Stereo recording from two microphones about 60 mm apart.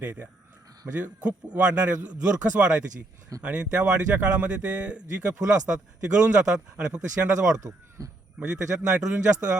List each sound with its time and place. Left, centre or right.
0.0 s a man's voice: right
7.5 s speech: right
8.4 s speech: centre